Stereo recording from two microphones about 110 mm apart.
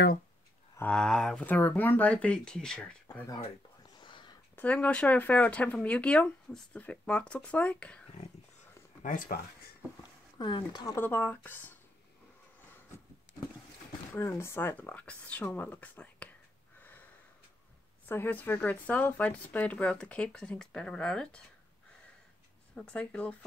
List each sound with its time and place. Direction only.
0.8 s speech: 5° left (ahead or behind)
3.9 s whispering: 45° left (ahead or behind)
4.6 s speech: 15° left (ahead or behind)
10.4 s speech: 40° left (ahead or behind)
11.0 s speech: 20° left (ahead or behind)
14.1 s speech: 25° left (ahead or behind)
18.0 s speech: 15° left (ahead or behind)
22.8 s speech: 10° left (ahead or behind)